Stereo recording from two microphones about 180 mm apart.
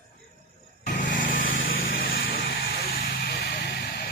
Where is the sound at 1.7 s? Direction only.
90° left; by 2.3 s 55° left (ahead or behind).